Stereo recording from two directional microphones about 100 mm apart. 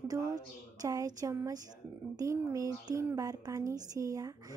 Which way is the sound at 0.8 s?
35° right (ahead or behind).